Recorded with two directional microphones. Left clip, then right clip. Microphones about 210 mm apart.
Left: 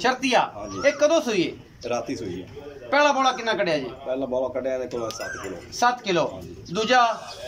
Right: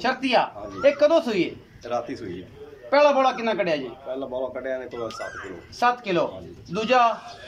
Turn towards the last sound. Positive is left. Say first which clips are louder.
# even
turn(degrees=-5)  # may be behind; listen again after turning